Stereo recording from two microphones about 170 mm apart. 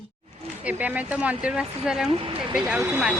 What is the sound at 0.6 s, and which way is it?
Speech, 10° right (ahead or behind).